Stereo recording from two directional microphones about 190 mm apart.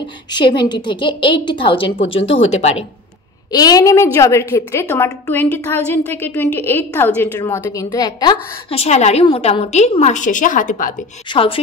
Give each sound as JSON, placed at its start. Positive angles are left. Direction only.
{"t": 0.3, "sound": "a woman's voice", "side_deg": 25}
{"t": 3.5, "sound": "a woman's voice", "side_deg": 20}
{"t": 11.3, "sound": "a woman's voice", "side_deg": 30}